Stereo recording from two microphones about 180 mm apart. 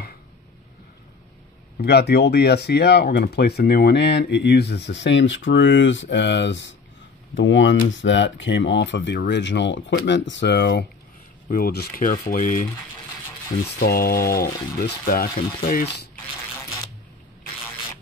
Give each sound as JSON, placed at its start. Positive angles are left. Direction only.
{"t": 1.8, "sound": "speech", "side_deg": 65}
{"t": 7.3, "sound": "speech", "side_deg": 90}
{"t": 13.7, "sound": "speech", "side_deg": 55}